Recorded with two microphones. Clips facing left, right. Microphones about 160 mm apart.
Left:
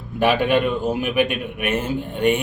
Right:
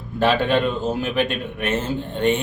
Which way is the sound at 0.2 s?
15° left (ahead or behind).